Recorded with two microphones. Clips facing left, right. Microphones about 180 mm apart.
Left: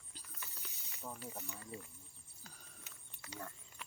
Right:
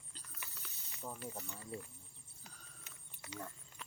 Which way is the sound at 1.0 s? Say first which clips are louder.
Right 1 dB; 10° right (ahead or behind).